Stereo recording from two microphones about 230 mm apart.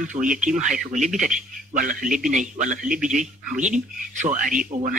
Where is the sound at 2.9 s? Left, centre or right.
Centre.